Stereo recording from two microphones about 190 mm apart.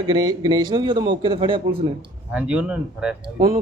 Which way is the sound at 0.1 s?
20° right (ahead or behind).